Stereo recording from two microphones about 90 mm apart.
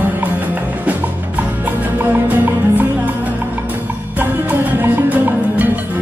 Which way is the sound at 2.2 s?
20° right (ahead or behind).